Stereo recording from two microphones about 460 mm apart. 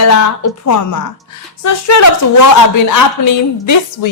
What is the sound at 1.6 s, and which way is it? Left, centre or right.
A woman's voice, left.